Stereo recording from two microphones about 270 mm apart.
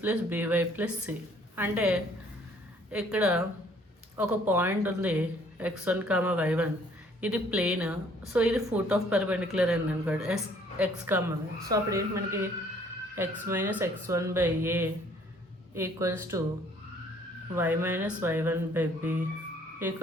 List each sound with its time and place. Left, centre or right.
0.0 s a woman's voice: centre
13.5 s speech: centre
17.5 s speech: centre